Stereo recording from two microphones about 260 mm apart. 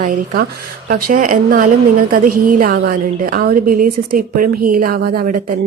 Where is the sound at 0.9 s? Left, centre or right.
Right.